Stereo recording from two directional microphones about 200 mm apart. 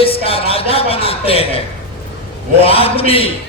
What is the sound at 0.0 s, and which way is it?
Music, 30° left (ahead or behind).